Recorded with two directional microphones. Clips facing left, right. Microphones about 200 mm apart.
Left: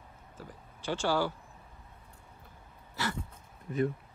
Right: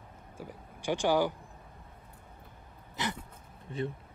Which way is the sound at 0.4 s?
15° right (ahead or behind).